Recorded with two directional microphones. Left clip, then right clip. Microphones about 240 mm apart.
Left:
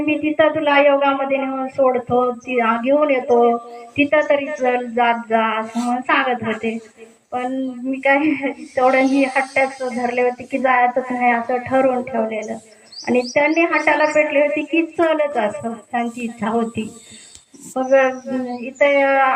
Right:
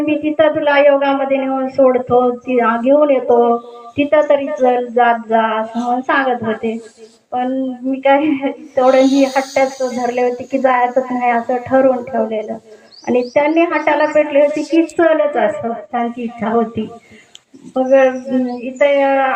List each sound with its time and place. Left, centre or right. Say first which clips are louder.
0.0 s speech: right 3 dB; right
3.9 s speech: right 4 dB; right
7.3 s a sound: right 5 dB; right
17.7 s speech: right 4 dB; right